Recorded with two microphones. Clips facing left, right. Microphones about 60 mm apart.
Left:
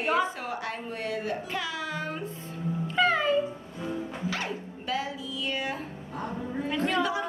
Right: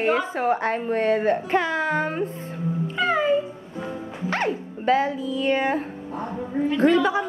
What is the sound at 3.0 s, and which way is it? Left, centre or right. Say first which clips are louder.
Music: right 3 dB; centre.